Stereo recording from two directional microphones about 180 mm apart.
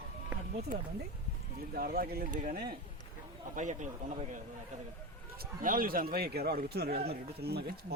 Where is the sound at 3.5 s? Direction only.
45° right (ahead or behind).